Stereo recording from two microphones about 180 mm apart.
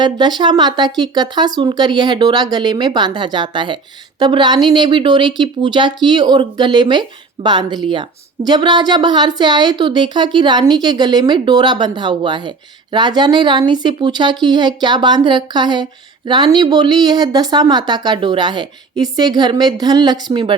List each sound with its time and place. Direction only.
0.0 s a woman's voice: 25° right (ahead or behind)